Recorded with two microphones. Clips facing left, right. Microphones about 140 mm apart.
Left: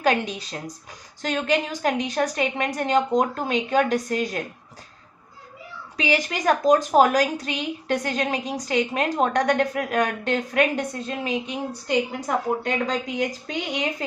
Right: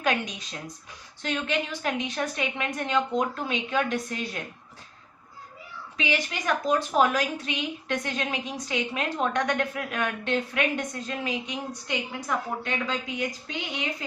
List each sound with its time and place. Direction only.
0.0 s a woman's voice: 35° left (ahead or behind)
6.0 s a woman's voice: 40° left (ahead or behind)